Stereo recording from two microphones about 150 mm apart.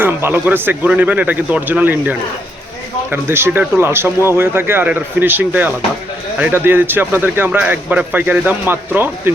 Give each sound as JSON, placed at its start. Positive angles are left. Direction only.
{"t": 0.0, "sound": "speech", "side_deg": -15}